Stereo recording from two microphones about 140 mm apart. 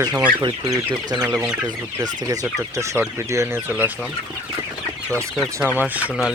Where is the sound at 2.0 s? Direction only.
25° right (ahead or behind).